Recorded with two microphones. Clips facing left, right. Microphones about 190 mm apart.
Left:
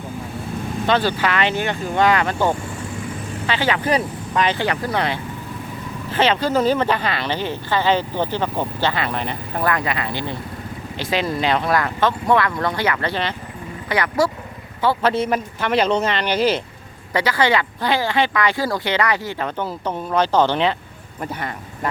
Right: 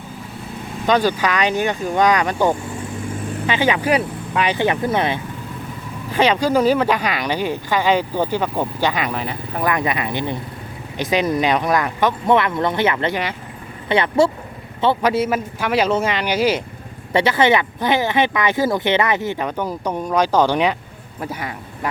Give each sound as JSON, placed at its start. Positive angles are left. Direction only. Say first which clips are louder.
{"t": 0.9, "sound": "speech", "louder": "right 2 dB", "side_deg": -15}
{"t": 9.6, "sound": "speech", "louder": "right 2 dB", "side_deg": -20}
{"t": 15.0, "sound": "speech", "louder": "right 1 dB", "side_deg": -10}
{"t": 17.1, "sound": "speech", "louder": "right 3 dB", "side_deg": -25}